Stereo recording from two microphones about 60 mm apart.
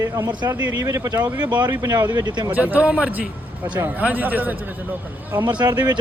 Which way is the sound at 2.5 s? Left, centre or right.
Right.